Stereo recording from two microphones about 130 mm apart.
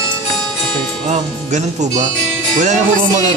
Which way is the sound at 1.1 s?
65° right (ahead or behind).